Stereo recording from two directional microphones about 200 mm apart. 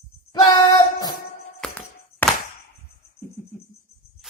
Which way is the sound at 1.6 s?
5° left (ahead or behind).